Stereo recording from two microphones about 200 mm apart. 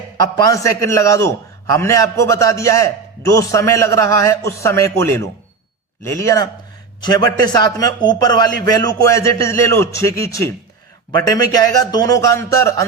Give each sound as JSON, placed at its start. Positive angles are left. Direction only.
{"t": 0.2, "sound": "a man's voice", "side_deg": 20}